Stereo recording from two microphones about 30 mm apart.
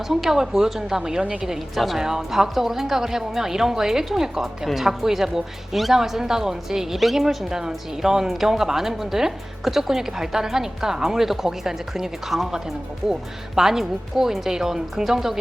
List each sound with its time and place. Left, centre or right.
0.1 s speech: centre
1.5 s a woman's voice: centre
2.0 s a woman's voice: centre
8.0 s speech: centre
13.6 s speech: centre